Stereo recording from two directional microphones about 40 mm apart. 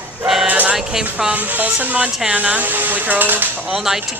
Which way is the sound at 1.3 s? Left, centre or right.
Right.